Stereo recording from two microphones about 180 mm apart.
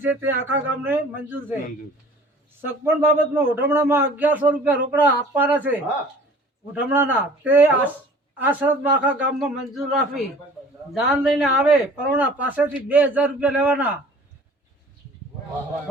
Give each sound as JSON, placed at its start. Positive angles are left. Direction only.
{"t": 0.0, "sound": "a man's voice", "side_deg": -10}
{"t": 2.8, "sound": "a man's voice", "side_deg": -10}